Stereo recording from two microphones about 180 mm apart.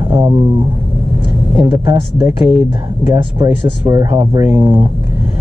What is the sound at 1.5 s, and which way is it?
Speech, 20° right (ahead or behind).